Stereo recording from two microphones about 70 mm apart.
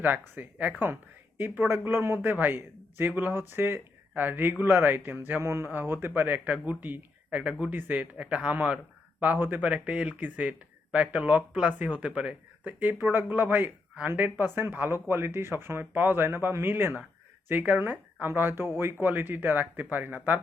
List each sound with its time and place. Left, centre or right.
0.0 s a man's voice: right